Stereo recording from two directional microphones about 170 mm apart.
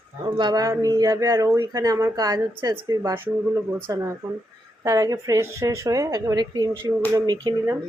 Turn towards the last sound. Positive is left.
turn(degrees=-25)  # may be behind; listen again after turning